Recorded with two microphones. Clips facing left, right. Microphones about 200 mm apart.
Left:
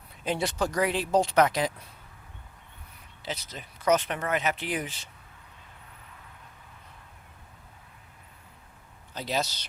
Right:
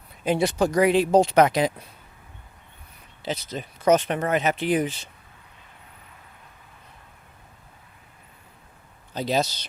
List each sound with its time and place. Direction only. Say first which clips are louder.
0.3 s speech: right 7 dB; 10° right (ahead or behind)
3.2 s speech: right 7 dB; 25° right (ahead or behind)
9.1 s speech: right 6 dB; 20° right (ahead or behind)